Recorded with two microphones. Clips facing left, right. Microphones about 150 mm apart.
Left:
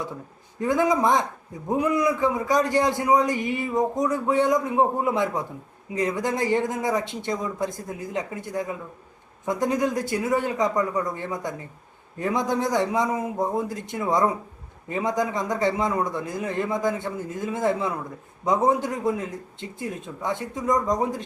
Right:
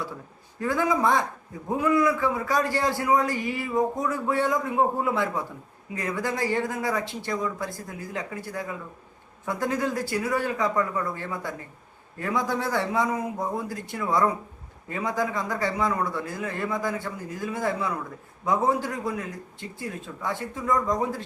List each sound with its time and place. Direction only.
0.6 s a man's voice: 20° left (ahead or behind)